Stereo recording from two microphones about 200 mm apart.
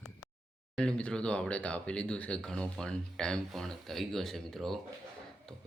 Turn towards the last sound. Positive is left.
turn(degrees=5)  # may be behind; listen again after turning